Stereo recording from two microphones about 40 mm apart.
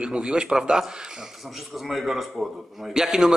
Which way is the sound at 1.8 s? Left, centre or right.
Centre.